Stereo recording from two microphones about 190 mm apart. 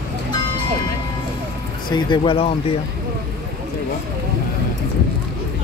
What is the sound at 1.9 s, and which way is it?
Speech, 25° left (ahead or behind).